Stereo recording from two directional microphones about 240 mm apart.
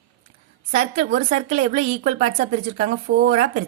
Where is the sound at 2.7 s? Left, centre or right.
Right.